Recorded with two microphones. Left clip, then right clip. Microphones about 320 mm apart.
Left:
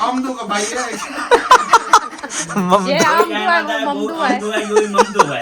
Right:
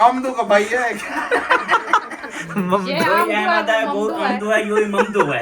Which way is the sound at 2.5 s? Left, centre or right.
Centre.